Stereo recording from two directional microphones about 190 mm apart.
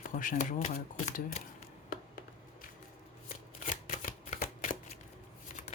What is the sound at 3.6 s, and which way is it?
Shuffling cards, 45° left (ahead or behind).